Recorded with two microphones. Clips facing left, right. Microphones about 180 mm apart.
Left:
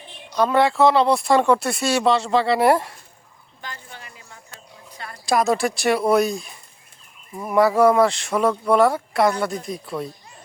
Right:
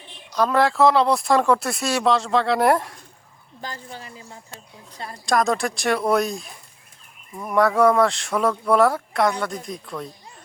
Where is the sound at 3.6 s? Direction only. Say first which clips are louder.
Right 3 dB; 35° right (ahead or behind).